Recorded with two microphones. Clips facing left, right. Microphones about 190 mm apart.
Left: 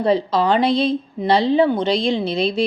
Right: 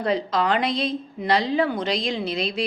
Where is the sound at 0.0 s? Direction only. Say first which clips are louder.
Left 5 dB; 30° left (ahead or behind).